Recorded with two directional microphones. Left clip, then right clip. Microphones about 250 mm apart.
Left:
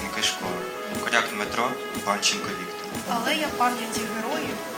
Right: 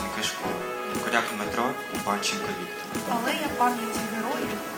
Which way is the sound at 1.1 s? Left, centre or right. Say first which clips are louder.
Left 3 dB; left.